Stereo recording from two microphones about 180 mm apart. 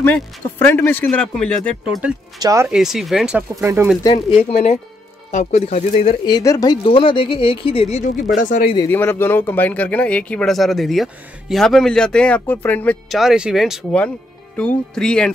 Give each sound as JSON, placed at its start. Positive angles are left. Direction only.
{"t": 0.0, "sound": "speech", "side_deg": 10}
{"t": 2.4, "sound": "speech", "side_deg": -15}
{"t": 2.7, "sound": "speech", "side_deg": -5}
{"t": 4.0, "sound": "speech", "side_deg": 30}
{"t": 6.2, "sound": "speech", "side_deg": 20}
{"t": 8.7, "sound": "speech", "side_deg": 10}